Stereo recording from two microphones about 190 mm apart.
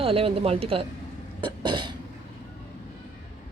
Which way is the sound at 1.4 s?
25° right (ahead or behind).